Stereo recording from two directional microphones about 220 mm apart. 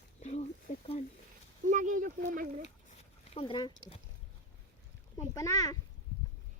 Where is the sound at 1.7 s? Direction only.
35° right (ahead or behind).